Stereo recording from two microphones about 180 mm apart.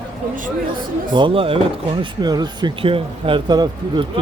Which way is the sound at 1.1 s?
25° right (ahead or behind).